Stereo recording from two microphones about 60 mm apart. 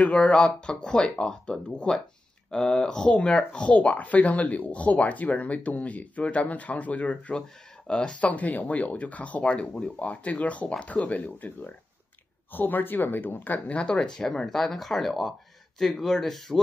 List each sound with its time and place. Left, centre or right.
0.0 s speech: centre
13.7 s speech: centre